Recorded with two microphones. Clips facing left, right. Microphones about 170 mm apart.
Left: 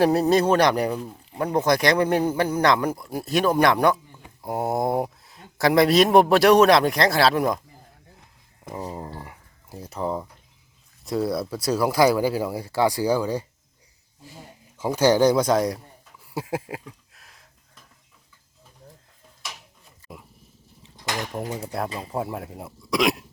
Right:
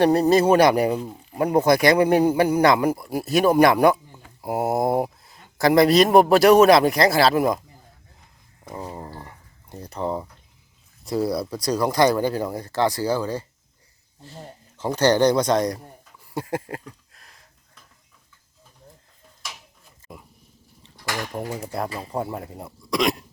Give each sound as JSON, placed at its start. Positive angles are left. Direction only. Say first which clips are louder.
{"t": 0.0, "sound": "speech", "louder": "right 2 dB", "side_deg": 0}
{"t": 8.7, "sound": "speech", "louder": "left 1 dB", "side_deg": 10}
{"t": 9.1, "sound": "a sound", "louder": "left 1 dB", "side_deg": 10}
{"t": 11.0, "sound": "speech", "louder": "right 1 dB", "side_deg": 0}
{"t": 20.1, "sound": "dog", "louder": "even", "side_deg": 0}
{"t": 20.9, "sound": "a sound", "louder": "even", "side_deg": 20}
{"t": 21.6, "sound": "speech", "louder": "even", "side_deg": 0}